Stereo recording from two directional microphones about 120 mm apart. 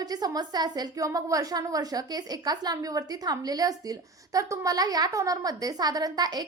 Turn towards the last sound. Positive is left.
turn(degrees=-35)  # may be behind; listen again after turning